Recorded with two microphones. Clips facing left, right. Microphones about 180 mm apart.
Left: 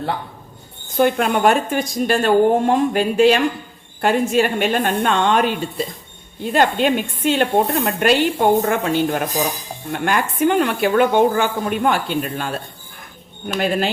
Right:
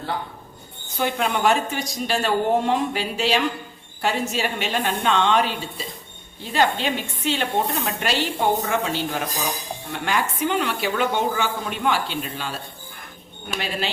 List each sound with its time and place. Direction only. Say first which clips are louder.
0.9 s speech: left 7 dB; 50° left (ahead or behind)
13.6 s speech: left 8 dB; 50° left (ahead or behind)